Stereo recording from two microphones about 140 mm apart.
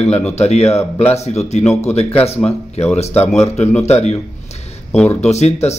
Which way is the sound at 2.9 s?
50° left (ahead or behind).